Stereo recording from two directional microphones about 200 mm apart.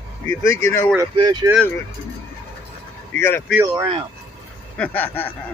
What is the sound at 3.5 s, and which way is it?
Speech, 10° right (ahead or behind).